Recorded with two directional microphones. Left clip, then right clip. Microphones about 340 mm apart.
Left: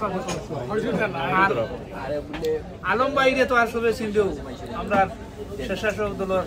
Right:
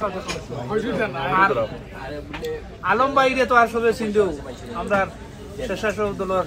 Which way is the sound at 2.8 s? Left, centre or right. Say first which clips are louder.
Right 3 dB; centre.